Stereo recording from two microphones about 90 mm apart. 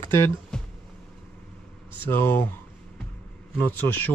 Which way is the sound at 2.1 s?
25° left (ahead or behind).